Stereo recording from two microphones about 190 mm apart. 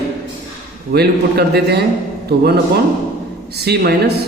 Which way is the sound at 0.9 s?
55° right (ahead or behind).